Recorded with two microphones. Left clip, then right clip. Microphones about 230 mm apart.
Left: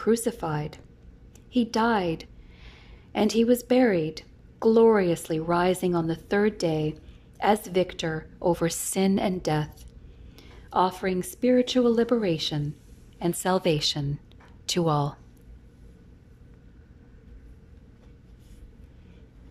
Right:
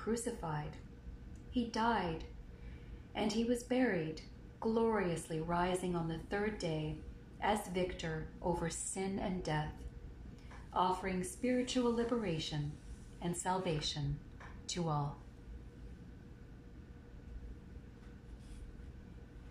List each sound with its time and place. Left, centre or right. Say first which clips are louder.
0.0 s a woman's voice: left 14 dB; left
3.1 s a woman's voice: left 14 dB; left
10.7 s a woman's voice: left 10 dB; left